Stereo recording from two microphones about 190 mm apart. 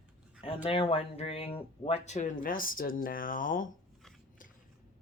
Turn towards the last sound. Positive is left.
turn(degrees=45)  # may be behind; listen again after turning